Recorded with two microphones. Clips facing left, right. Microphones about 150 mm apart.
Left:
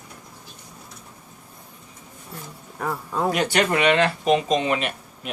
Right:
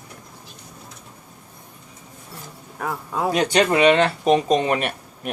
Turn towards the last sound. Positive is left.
turn(degrees=-50)  # may be behind; listen again after turning